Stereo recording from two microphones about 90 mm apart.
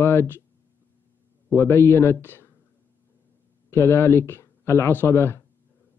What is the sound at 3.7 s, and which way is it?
Speech, 25° left (ahead or behind).